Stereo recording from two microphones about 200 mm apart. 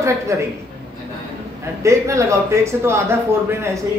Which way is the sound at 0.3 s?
15° right (ahead or behind).